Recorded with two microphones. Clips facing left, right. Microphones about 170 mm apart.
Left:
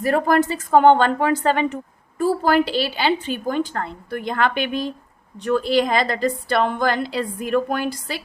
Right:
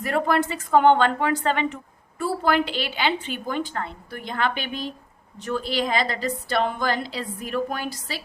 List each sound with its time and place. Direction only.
0.0 s a woman's voice: 40° left (ahead or behind)